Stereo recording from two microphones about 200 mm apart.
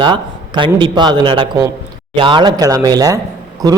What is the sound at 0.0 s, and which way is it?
A man's voice, 25° right (ahead or behind).